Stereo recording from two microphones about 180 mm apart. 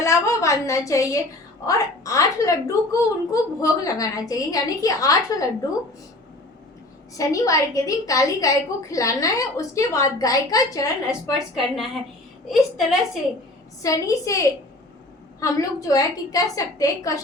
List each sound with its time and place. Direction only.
0.0 s a woman's voice: 15° left (ahead or behind)
7.2 s a woman's voice: 20° left (ahead or behind)
11.0 s a woman's voice: 5° right (ahead or behind)
13.8 s a woman's voice: 20° left (ahead or behind)